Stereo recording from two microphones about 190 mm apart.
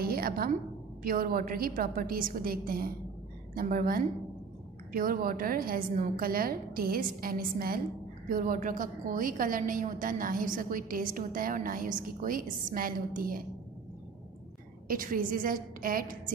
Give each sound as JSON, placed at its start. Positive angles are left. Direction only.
{"t": 0.0, "sound": "a sound", "side_deg": -50}
{"t": 1.0, "sound": "a woman's voice", "side_deg": -50}
{"t": 14.9, "sound": "a woman's voice", "side_deg": -45}